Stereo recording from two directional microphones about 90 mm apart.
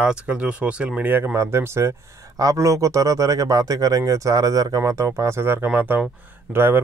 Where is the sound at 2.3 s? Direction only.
40° right (ahead or behind); by 6.8 s 25° right (ahead or behind).